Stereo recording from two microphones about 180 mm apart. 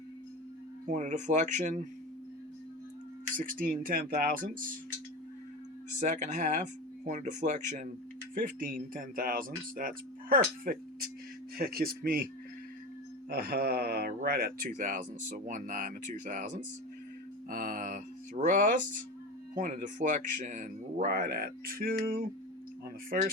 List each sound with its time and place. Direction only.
0.9 s speech: 45° right (ahead or behind)
3.3 s speech: 50° right (ahead or behind)
6.0 s speech: 40° right (ahead or behind)
13.3 s speech: 55° right (ahead or behind)
17.5 s mantra: 50° right (ahead or behind)
19.5 s speech: 45° right (ahead or behind)